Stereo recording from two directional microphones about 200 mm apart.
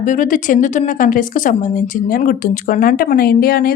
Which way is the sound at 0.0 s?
40° left (ahead or behind).